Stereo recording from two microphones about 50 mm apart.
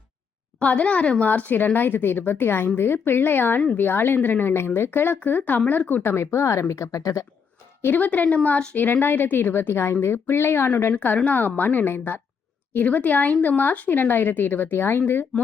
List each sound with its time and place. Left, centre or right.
0.6 s a woman's voice: left
6.0 s speech: left
7.8 s a woman's voice: left
10.9 s speech: left
12.7 s speech: left